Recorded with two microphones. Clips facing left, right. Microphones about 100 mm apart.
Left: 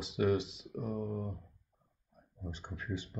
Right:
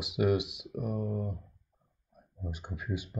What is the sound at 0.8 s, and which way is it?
Speech, 15° right (ahead or behind).